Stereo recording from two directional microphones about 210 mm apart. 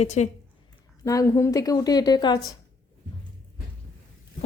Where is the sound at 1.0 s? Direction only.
15° left (ahead or behind).